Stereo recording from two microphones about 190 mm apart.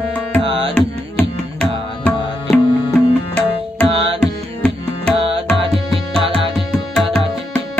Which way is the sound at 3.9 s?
30° right (ahead or behind).